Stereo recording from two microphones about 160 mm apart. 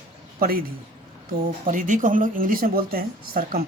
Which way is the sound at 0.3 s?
70° right (ahead or behind).